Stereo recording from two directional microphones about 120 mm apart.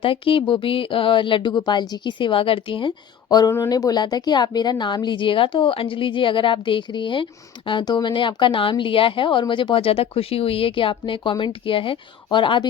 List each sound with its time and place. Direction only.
0.0 s speech: 50° left (ahead or behind)